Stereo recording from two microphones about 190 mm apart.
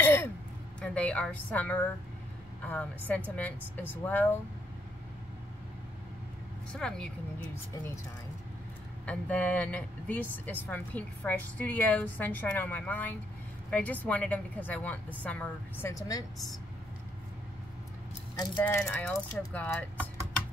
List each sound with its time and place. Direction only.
0.0 s a sound: 10° left (ahead or behind)
0.7 s speech: 5° left (ahead or behind)
6.7 s speech: 5° left (ahead or behind)
9.0 s speech: 5° left (ahead or behind)
18.3 s speech: 20° left (ahead or behind)
18.6 s speech: 10° left (ahead or behind)